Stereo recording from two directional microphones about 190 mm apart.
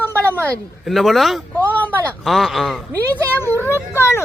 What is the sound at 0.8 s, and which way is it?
Speech, centre (ahead or behind).